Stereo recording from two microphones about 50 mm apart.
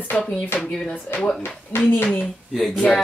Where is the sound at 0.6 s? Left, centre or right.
Centre.